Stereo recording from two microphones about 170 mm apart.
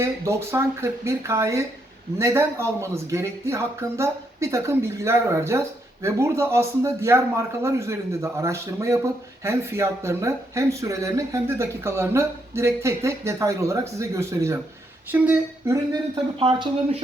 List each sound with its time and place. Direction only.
0.0 s speech: 15° right (ahead or behind)
16.4 s speech: 30° right (ahead or behind)